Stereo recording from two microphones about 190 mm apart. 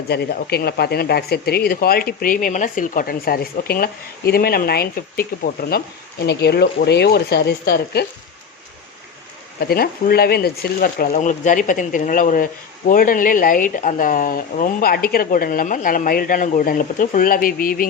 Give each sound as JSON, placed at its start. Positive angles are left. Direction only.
{"t": 0.1, "sound": "speech", "side_deg": 60}
{"t": 9.6, "sound": "speech", "side_deg": 55}